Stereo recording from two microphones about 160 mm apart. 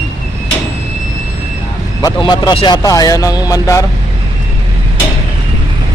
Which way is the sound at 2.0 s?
25° left (ahead or behind).